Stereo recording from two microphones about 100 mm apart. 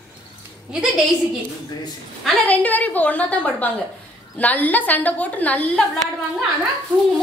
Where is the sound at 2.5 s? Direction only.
15° left (ahead or behind).